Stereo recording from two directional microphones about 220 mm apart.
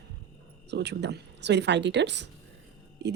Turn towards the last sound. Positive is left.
turn(degrees=-50)  # may be behind; listen again after turning